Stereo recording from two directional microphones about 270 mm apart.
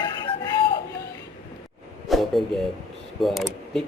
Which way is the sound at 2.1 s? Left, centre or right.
Centre.